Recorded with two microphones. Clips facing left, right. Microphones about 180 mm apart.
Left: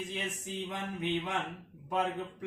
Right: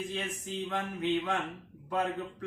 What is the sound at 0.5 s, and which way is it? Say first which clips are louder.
Speech: right 2 dB; 15° left (ahead or behind).